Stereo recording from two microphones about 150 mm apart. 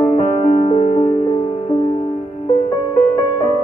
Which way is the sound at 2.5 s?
30° left (ahead or behind).